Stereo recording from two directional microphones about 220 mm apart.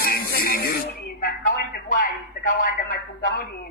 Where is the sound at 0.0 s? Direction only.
40° left (ahead or behind).